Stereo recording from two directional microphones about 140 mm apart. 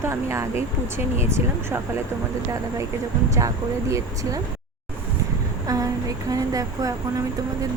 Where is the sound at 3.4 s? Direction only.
20° right (ahead or behind).